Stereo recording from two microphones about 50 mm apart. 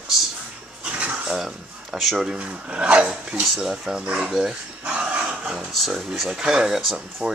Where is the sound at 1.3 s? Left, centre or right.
Centre.